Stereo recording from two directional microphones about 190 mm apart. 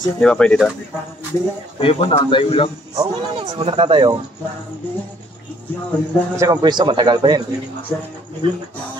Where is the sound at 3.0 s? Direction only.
30° right (ahead or behind).